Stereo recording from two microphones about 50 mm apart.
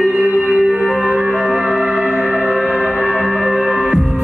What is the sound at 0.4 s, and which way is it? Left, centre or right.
Music, right.